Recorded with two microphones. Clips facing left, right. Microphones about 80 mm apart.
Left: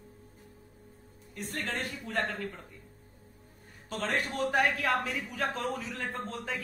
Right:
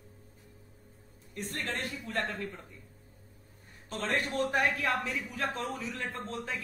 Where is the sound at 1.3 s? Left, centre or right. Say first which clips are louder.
Left 1 dB; left.